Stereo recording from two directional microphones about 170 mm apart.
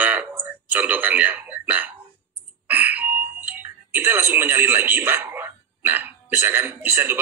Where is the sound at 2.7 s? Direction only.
10° right (ahead or behind).